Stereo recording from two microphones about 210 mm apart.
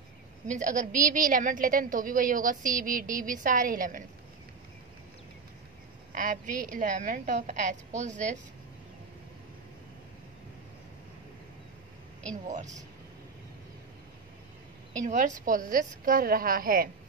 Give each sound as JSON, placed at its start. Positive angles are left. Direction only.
{"t": 0.5, "sound": "a woman's voice", "side_deg": -35}
{"t": 6.1, "sound": "a woman's voice", "side_deg": -40}
{"t": 15.0, "sound": "a woman's voice", "side_deg": -35}